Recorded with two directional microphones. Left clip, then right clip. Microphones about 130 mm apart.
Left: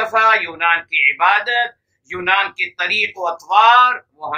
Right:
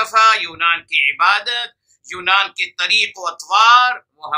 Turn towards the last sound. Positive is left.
turn(degrees=-40)  # may be behind; listen again after turning